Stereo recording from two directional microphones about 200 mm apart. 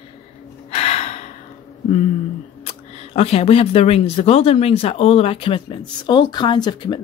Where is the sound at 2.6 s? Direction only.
30° left (ahead or behind).